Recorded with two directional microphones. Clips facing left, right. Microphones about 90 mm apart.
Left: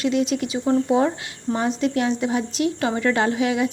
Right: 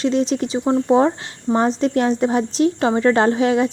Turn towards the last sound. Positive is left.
turn(degrees=-35)  # may be behind; listen again after turning